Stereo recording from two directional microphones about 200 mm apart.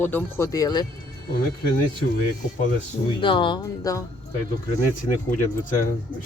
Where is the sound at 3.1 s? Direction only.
25° left (ahead or behind).